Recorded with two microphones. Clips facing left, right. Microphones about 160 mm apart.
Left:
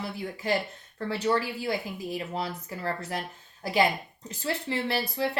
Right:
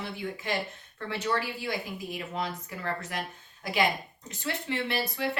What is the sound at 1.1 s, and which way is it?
Speech, 35° left (ahead or behind).